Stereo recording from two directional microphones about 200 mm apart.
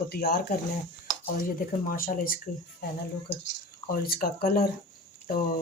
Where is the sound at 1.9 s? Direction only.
45° left (ahead or behind).